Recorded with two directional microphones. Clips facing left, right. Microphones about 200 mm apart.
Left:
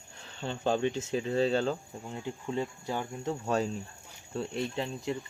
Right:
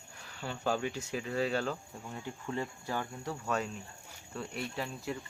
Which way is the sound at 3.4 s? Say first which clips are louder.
Left 4 dB; 30° left (ahead or behind).